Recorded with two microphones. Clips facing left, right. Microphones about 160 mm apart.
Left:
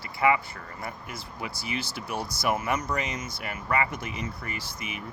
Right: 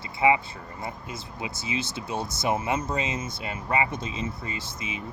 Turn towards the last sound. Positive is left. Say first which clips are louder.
# right 2 dB
turn(degrees=-25)  # may be behind; listen again after turning